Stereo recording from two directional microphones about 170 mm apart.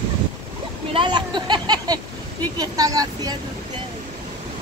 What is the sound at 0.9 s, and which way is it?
Speech, 25° right (ahead or behind).